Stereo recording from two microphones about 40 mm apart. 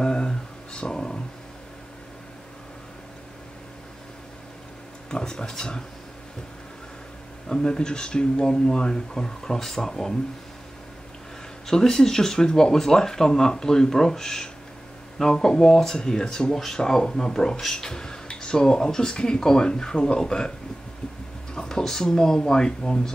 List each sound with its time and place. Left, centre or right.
0.0 s a sound: left
5.1 s speech: centre
7.4 s speech: left
11.6 s speech: centre
21.5 s speech: centre